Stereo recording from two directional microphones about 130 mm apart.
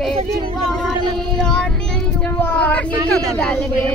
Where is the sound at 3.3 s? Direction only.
5° left (ahead or behind).